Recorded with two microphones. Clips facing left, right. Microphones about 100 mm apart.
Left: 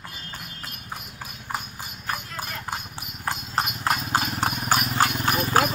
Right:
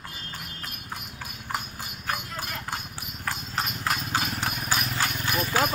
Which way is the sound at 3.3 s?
40° left (ahead or behind).